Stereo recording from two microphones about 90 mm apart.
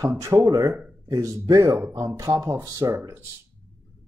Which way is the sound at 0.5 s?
55° right (ahead or behind).